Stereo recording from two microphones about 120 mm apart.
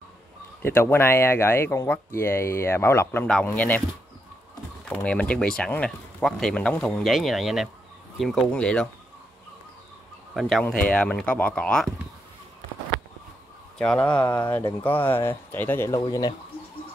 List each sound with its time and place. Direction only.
0.6 s speech: 20° left (ahead or behind)
4.8 s speech: 10° left (ahead or behind)
10.6 s speech: 10° left (ahead or behind)
13.7 s speech: 10° left (ahead or behind)
14.2 s speech: 35° left (ahead or behind)
14.8 s speech: 15° left (ahead or behind)
16.0 s speech: 35° left (ahead or behind)